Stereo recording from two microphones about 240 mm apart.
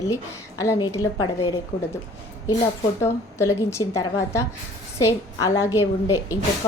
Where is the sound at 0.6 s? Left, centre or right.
Centre.